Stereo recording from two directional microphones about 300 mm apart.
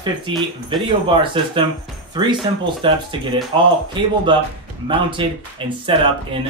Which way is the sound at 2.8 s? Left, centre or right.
Centre.